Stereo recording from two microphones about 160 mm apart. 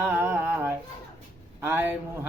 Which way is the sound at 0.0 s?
15° right (ahead or behind).